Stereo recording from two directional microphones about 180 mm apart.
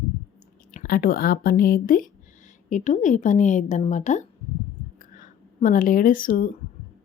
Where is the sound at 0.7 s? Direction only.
50° left (ahead or behind).